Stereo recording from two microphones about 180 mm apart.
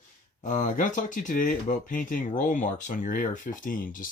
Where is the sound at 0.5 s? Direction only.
45° left (ahead or behind).